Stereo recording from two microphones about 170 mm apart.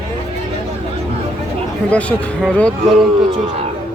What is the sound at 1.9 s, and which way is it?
Speech, 10° left (ahead or behind).